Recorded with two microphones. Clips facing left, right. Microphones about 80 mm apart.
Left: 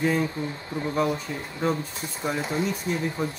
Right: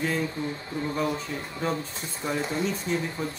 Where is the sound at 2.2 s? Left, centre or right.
Centre.